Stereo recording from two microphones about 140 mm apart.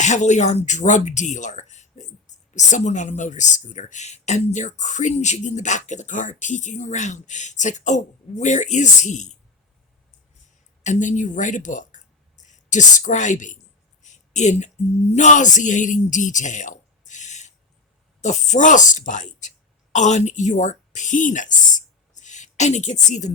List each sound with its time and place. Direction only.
0.0 s speech: 60° left (ahead or behind)
10.8 s a woman's voice: 60° left (ahead or behind)